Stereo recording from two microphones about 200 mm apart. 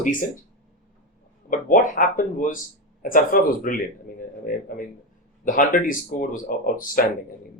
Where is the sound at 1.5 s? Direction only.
40° left (ahead or behind).